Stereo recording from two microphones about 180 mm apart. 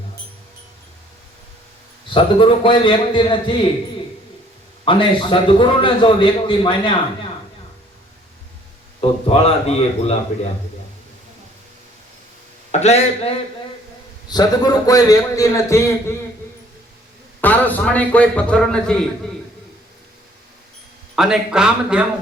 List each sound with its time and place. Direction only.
2.1 s a man's voice: 30° left (ahead or behind)
4.9 s a man's voice: 30° left (ahead or behind)
9.0 s a man's voice: 35° left (ahead or behind)
12.8 s a man's voice: 35° left (ahead or behind)
14.3 s a man's voice: 20° left (ahead or behind)
17.4 s a man's voice: 10° left (ahead or behind)
21.2 s speech: 5° right (ahead or behind)